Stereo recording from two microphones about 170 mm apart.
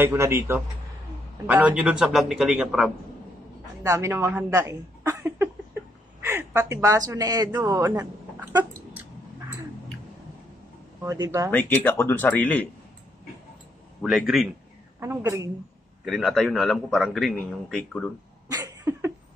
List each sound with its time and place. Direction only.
0.0 s a man's voice: 15° right (ahead or behind)
3.8 s speech: 15° right (ahead or behind)
11.1 s speech: 20° right (ahead or behind)
11.5 s speech: 10° left (ahead or behind)
14.0 s a man's voice: centre (ahead or behind)
15.0 s a man's voice: 15° right (ahead or behind)
16.1 s a man's voice: centre (ahead or behind)
18.5 s a sound: 20° right (ahead or behind)